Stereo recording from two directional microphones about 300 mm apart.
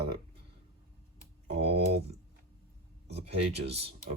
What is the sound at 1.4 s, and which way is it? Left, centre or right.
Speech, right.